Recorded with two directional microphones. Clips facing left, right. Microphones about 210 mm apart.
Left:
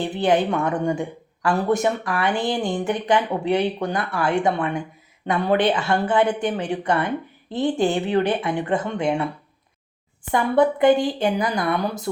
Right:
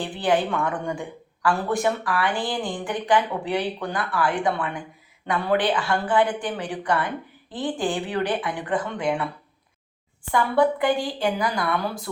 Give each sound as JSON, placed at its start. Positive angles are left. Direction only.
{"t": 0.0, "sound": "speech", "side_deg": 20}
{"t": 10.3, "sound": "speech", "side_deg": 20}